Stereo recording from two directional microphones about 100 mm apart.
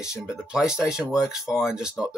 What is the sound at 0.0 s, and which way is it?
Speech, 5° right (ahead or behind).